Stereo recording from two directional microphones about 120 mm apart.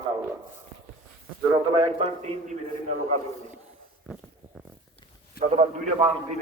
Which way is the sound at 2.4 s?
80° right.